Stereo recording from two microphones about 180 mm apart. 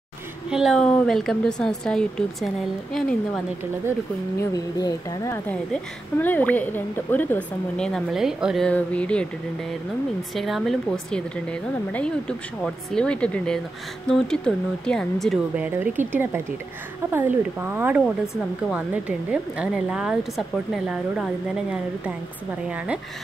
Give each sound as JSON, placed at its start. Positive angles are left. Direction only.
{"t": 0.5, "sound": "speech", "side_deg": 0}
{"t": 4.4, "sound": "a woman's voice", "side_deg": 20}
{"t": 17.1, "sound": "speech", "side_deg": -10}